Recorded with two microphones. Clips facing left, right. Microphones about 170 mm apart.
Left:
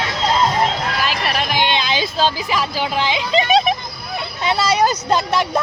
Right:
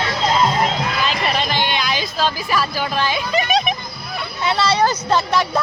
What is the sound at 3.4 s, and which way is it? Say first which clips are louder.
Children playing: left 4 dB; 35° left (ahead or behind).